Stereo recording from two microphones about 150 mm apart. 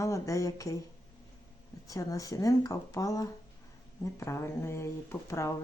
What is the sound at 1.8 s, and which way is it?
Speech, 20° left (ahead or behind).